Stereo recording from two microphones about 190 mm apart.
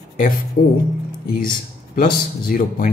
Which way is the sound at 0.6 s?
60° left (ahead or behind).